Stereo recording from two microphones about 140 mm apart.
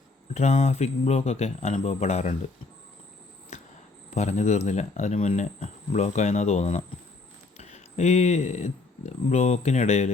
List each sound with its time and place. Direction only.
0.3 s speech: 55° left (ahead or behind)
4.1 s speech: 55° left (ahead or behind)